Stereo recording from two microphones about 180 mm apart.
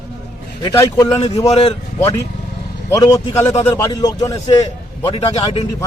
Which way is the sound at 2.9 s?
20° left (ahead or behind).